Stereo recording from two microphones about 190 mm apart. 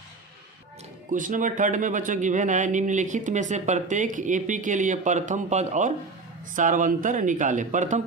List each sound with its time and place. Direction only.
1.1 s speech: 45° right (ahead or behind)